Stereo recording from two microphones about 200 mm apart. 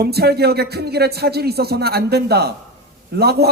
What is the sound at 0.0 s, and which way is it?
A man's voice, 55° right (ahead or behind).